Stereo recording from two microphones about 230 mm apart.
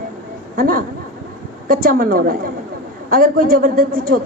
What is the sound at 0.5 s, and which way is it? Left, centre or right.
A man's voice, right.